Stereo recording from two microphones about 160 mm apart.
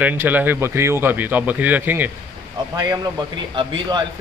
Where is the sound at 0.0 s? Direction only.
10° right (ahead or behind).